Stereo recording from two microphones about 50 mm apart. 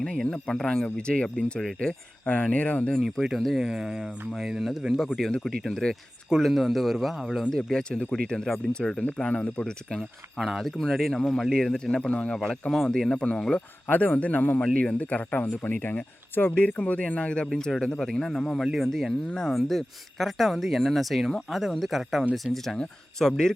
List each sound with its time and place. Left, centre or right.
0.0 s speech: centre
2.2 s speech: left
2.9 s speech: centre
3.6 s speech: centre
5.5 s speech: centre
7.5 s speech: centre
9.6 s speech: centre
10.3 s speech: centre
12.0 s speech: left
12.7 s speech: centre
13.8 s speech: left
16.6 s speech: left; by 18.6 s centre
18.6 s speech: centre
18.9 s speech: centre